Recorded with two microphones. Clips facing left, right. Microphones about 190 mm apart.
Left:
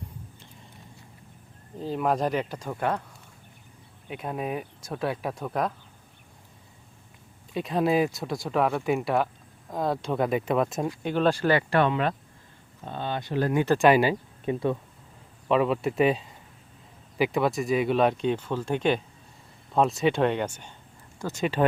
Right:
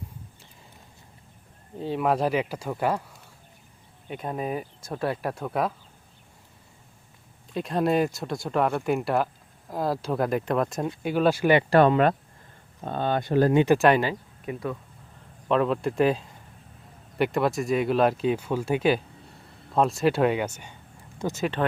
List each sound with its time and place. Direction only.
1.8 s speech: centre (ahead or behind)
4.1 s speech: centre (ahead or behind)
7.5 s speech: centre (ahead or behind)
11.7 s speech: 40° right (ahead or behind)
13.7 s speech: centre (ahead or behind)
14.4 s speech: 30° left (ahead or behind)
15.4 s speech: centre (ahead or behind); by 21.4 s 15° right (ahead or behind)